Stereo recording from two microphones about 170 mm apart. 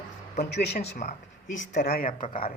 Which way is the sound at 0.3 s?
70° left (ahead or behind).